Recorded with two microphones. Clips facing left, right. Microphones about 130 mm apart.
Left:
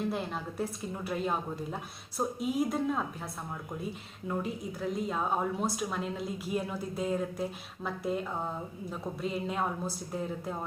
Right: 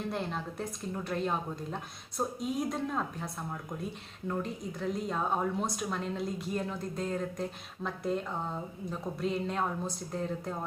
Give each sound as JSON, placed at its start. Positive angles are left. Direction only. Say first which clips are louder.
{"t": 0.0, "sound": "speech", "louder": "left 1 dB", "side_deg": 5}